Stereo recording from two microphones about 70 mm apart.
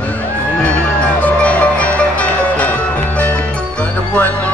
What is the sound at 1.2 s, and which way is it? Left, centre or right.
Music, centre.